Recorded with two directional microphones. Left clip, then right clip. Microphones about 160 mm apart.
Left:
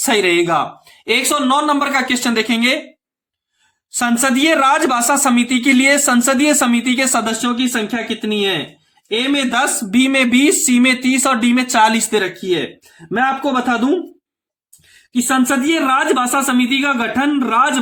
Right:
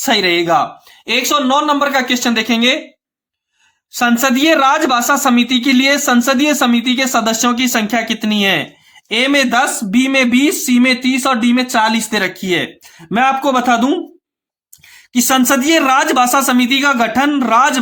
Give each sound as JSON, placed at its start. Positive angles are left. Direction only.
{"t": 0.0, "sound": "speech", "side_deg": -20}
{"t": 3.9, "sound": "speech", "side_deg": -20}
{"t": 7.4, "sound": "speech", "side_deg": -45}
{"t": 9.5, "sound": "speech", "side_deg": -20}
{"t": 12.1, "sound": "speech", "side_deg": -40}
{"t": 15.1, "sound": "speech", "side_deg": -40}